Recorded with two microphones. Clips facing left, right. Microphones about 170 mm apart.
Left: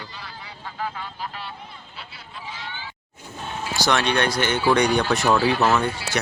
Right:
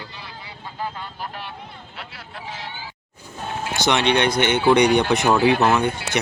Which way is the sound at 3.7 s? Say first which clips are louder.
Right 2 dB; 20° right (ahead or behind).